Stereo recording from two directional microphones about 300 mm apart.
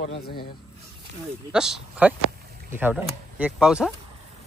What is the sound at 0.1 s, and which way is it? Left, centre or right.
Speech, left.